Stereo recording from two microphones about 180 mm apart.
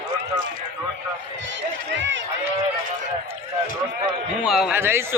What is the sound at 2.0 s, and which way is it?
Speech, 85° right.